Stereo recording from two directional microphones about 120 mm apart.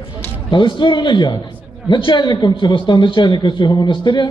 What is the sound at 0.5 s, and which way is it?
A man's voice, 40° left (ahead or behind).